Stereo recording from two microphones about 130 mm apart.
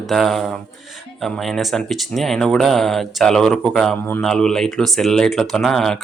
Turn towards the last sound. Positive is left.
turn(degrees=0)  # may be behind; listen again after turning